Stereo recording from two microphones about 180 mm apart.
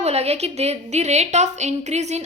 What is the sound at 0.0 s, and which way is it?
A woman's voice, 35° right (ahead or behind).